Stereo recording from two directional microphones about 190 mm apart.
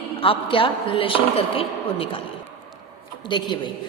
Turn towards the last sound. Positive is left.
turn(degrees=25)  # may be behind; listen again after turning